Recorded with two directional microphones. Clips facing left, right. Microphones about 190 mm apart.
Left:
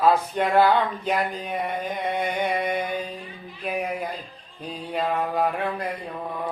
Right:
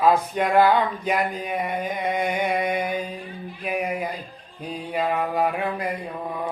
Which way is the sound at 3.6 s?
10° right (ahead or behind).